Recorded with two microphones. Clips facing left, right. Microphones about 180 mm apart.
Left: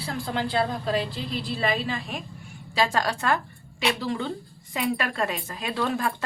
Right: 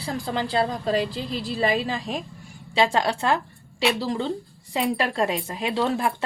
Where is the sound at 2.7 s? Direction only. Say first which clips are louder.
Right 3 dB; 25° right (ahead or behind).